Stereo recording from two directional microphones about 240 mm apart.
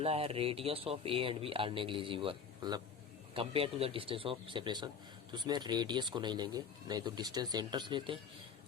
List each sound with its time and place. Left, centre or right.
0.0 s speech: right